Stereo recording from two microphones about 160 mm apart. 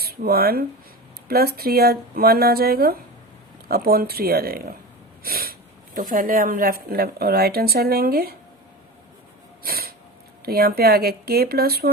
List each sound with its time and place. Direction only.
0.0 s speech: 70° right (ahead or behind)
9.6 s a sound: 70° right (ahead or behind)
10.4 s speech: 75° right (ahead or behind)